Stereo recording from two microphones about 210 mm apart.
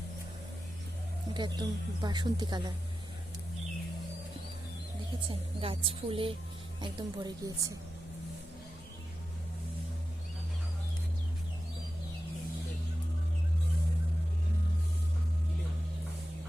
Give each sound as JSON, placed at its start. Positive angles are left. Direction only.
{"t": 1.3, "sound": "speech", "side_deg": -20}
{"t": 5.3, "sound": "speech", "side_deg": -25}